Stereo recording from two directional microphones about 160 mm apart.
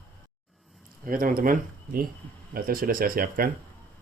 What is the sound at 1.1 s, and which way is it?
Speech, 60° right (ahead or behind).